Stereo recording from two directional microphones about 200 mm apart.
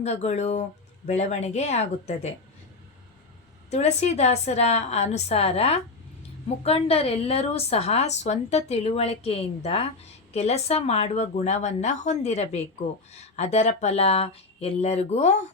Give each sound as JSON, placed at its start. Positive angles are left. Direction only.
{"t": 0.0, "sound": "a woman's voice", "side_deg": 35}
{"t": 3.7, "sound": "a woman's voice", "side_deg": 35}